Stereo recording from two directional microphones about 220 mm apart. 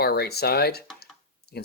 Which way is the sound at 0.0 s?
45° left (ahead or behind).